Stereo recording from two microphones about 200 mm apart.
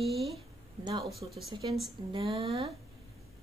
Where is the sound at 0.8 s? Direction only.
20° right (ahead or behind).